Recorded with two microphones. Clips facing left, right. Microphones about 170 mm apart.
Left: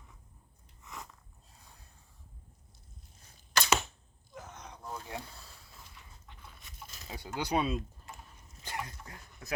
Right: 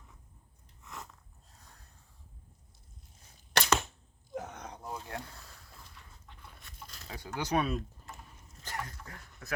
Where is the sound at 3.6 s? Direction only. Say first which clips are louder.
Right 1 dB; 75° right (ahead or behind).